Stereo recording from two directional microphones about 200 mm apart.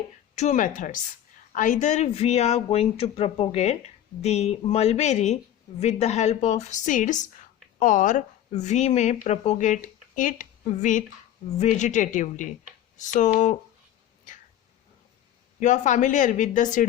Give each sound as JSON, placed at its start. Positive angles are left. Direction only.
{"t": 0.3, "sound": "speech", "side_deg": 35}
{"t": 15.6, "sound": "speech", "side_deg": 35}